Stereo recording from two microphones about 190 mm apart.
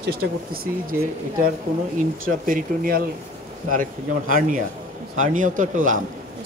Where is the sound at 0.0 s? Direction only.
55° right (ahead or behind).